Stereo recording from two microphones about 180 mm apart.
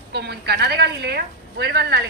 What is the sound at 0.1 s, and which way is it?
A man's voice, 65° right (ahead or behind).